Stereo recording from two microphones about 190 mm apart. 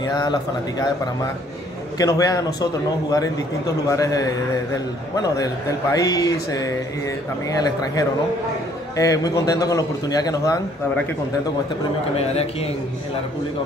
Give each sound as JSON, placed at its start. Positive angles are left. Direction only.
{"t": 0.0, "sound": "a man's voice", "side_deg": 20}
{"t": 2.0, "sound": "a man's voice", "side_deg": 20}
{"t": 7.6, "sound": "a man's voice", "side_deg": 20}